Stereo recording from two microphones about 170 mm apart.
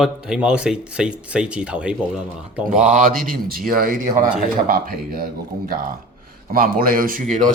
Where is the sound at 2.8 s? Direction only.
50° right (ahead or behind).